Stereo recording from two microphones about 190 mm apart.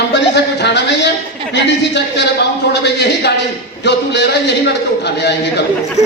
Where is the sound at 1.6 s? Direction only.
65° left (ahead or behind).